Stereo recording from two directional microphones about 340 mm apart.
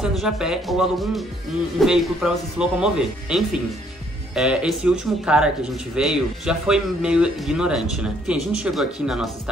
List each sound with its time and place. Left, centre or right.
0.0 s speech: centre